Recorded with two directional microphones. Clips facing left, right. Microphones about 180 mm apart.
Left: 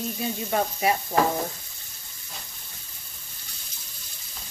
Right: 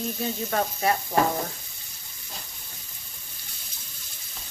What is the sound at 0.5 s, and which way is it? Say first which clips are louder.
Frying: left 1 dB; 10° left (ahead or behind).